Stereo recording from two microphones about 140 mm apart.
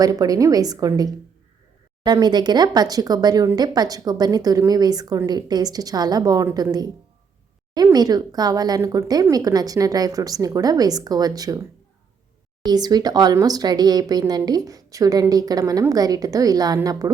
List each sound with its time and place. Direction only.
0.0 s speech: 25° right (ahead or behind)
12.6 s speech: 30° right (ahead or behind)